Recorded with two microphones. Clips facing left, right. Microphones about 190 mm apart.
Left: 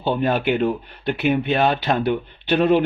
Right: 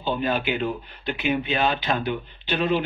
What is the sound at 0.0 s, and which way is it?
Speech, 55° left (ahead or behind).